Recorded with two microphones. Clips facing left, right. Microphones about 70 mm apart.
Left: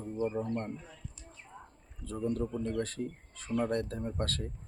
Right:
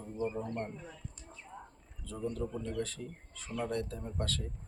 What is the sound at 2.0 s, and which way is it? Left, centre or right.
Speech, left.